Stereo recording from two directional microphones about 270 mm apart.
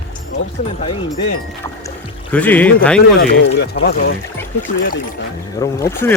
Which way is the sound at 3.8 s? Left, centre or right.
Left.